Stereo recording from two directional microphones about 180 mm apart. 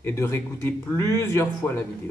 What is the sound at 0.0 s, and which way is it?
Speech, 15° left (ahead or behind).